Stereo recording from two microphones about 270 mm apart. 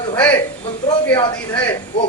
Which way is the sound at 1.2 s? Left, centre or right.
Centre.